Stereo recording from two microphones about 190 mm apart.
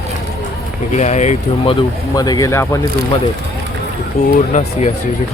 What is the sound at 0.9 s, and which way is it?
Speech, 35° left (ahead or behind).